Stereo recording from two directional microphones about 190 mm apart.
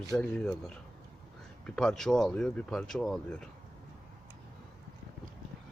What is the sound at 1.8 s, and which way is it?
Speech, 5° left (ahead or behind).